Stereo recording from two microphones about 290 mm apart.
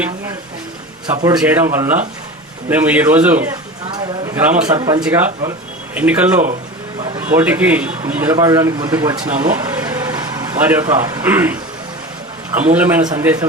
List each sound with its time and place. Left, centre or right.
1.0 s a man's voice: centre
4.7 s a man's voice: centre
12.7 s a man's voice: centre